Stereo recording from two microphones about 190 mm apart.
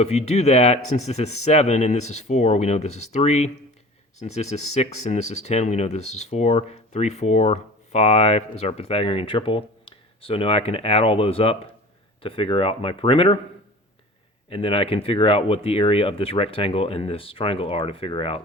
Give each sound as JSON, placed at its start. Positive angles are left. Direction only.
{"t": 0.0, "sound": "speech", "side_deg": 35}
{"t": 14.5, "sound": "speech", "side_deg": 30}